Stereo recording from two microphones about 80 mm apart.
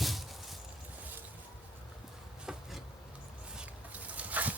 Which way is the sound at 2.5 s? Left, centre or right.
Centre.